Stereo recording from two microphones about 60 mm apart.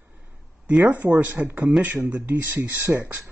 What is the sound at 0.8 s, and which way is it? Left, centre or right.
Speech, right.